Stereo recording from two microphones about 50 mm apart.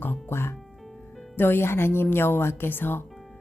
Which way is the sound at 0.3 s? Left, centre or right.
Left.